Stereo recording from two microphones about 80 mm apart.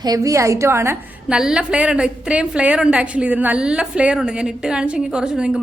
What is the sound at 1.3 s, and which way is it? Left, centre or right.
A woman's voice, centre.